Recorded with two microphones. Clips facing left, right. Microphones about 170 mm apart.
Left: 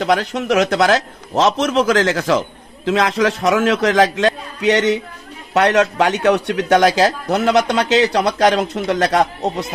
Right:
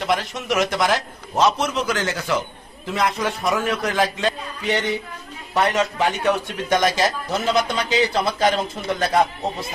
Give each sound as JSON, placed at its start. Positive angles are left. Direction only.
{"t": 0.0, "sound": "a man's voice", "side_deg": 70}